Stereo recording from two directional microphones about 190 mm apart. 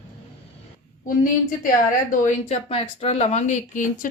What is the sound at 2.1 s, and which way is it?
Speech, 40° left (ahead or behind).